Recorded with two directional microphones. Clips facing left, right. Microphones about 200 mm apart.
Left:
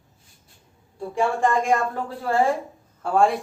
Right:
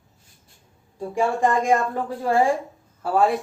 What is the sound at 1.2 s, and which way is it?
Speech, 15° right (ahead or behind).